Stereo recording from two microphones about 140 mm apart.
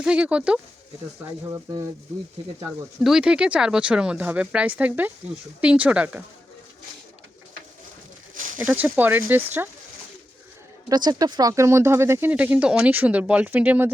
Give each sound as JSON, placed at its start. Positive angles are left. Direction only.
{"t": 0.0, "sound": "speech", "side_deg": -10}
{"t": 2.6, "sound": "speech", "side_deg": -5}
{"t": 8.5, "sound": "speech", "side_deg": -10}
{"t": 10.8, "sound": "speech", "side_deg": -30}